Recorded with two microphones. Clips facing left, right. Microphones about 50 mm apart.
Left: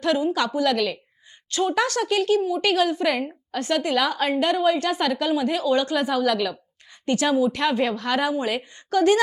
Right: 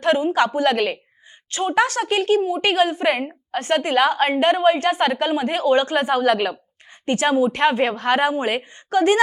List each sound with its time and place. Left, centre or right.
0.0 s a woman's voice: right
1.5 s a woman's voice: right